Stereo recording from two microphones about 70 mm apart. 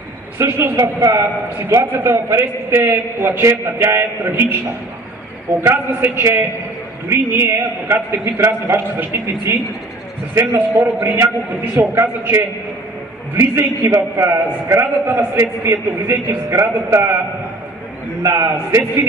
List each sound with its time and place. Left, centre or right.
0.4 s a man's voice: right
0.7 s a man's voice: right
1.2 s a man's voice: right
5.6 s a man's voice: right
18.2 s a man's voice: right